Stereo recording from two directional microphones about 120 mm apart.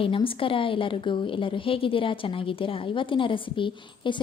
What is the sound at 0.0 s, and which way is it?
Speech, 50° left (ahead or behind).